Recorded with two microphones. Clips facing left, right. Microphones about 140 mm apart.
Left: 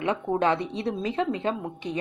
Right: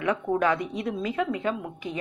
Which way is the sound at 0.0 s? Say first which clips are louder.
Even; 25° left (ahead or behind).